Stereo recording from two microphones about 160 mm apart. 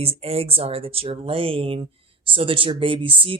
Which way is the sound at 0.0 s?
40° right (ahead or behind).